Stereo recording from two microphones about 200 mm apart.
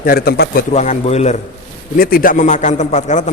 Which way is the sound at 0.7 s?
35° left (ahead or behind).